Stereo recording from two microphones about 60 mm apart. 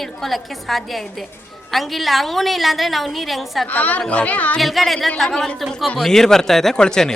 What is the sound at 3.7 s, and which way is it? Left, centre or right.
Speech, left.